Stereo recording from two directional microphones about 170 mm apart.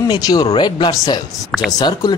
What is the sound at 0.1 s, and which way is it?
Speech, 25° left (ahead or behind).